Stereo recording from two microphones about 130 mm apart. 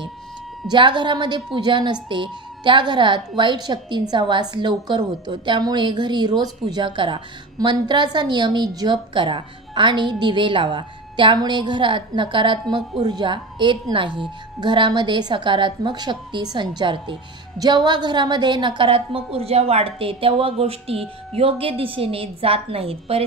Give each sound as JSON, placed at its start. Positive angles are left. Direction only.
{"t": 0.7, "sound": "a woman's voice", "side_deg": -35}